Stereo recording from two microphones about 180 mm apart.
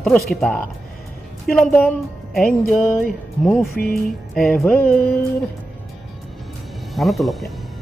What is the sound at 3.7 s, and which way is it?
Speech, 55° left (ahead or behind).